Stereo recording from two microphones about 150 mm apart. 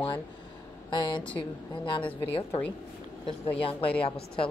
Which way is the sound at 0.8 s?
30° left (ahead or behind).